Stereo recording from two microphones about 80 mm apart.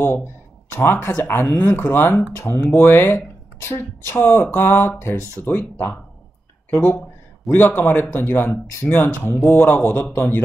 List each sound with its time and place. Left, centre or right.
0.0 s speech: left